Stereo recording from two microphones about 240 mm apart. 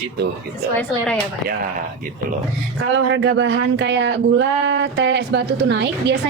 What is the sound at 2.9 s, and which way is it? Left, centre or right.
Speech, right.